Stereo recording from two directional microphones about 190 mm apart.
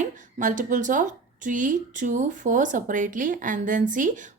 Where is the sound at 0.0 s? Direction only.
45° right (ahead or behind).